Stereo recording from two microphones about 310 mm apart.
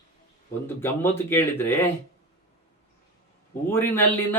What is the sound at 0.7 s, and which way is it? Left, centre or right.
A man's voice, centre.